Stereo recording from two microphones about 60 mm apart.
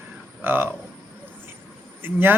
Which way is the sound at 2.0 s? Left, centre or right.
Right.